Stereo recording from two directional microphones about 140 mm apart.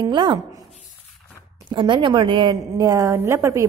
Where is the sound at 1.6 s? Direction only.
35° right (ahead or behind).